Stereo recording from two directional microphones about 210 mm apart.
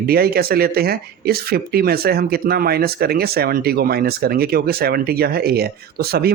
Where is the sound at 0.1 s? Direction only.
45° right (ahead or behind).